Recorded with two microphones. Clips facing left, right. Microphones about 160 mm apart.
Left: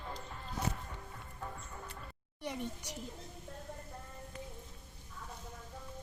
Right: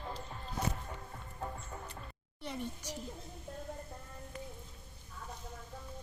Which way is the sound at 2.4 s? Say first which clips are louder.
Left 1 dB; 15° left (ahead or behind).